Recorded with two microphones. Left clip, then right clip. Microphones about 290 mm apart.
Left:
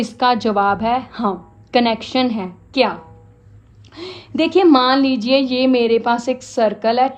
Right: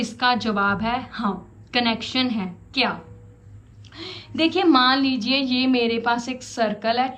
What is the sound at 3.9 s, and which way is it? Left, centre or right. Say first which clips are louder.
A woman's voice: left 6 dB; left.